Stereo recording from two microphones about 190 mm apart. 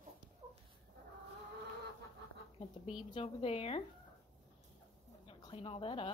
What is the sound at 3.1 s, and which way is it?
Speech, 30° left (ahead or behind).